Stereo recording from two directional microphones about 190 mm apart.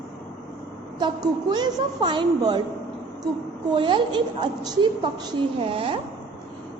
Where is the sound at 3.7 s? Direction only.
25° right (ahead or behind).